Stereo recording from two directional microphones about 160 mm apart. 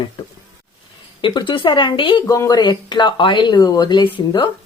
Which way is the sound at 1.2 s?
30° left (ahead or behind).